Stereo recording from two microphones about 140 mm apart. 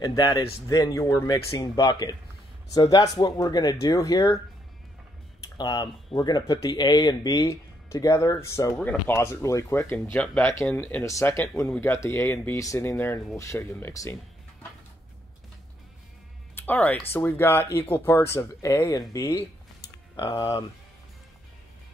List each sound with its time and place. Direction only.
0.0 s speech: 25° left (ahead or behind)
5.6 s speech: 30° left (ahead or behind)
16.5 s speech: 10° left (ahead or behind)
20.2 s speech: 35° left (ahead or behind)